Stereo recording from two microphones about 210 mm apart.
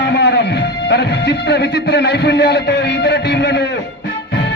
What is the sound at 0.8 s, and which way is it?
A man's voice, 55° left (ahead or behind).